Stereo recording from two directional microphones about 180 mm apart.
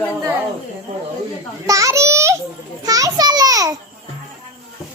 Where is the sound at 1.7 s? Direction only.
15° right (ahead or behind).